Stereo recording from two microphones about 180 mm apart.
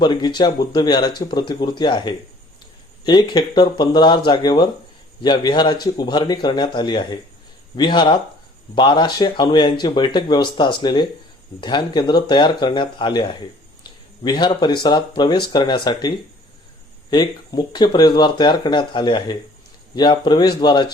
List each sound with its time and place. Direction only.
0.0 s speech: 25° left (ahead or behind)